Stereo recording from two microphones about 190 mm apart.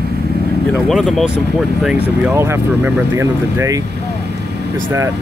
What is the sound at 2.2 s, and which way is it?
Speech, 10° right (ahead or behind).